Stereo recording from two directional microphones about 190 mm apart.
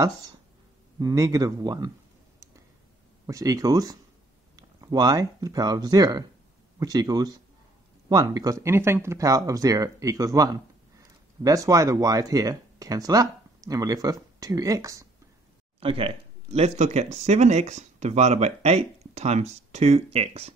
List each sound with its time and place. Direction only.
0.9 s a man's voice: 15° right (ahead or behind)
3.3 s a man's voice: 20° right (ahead or behind)
15.8 s speech: 30° right (ahead or behind)